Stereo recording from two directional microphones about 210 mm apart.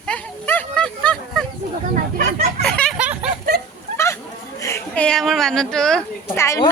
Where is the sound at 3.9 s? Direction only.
15° left (ahead or behind).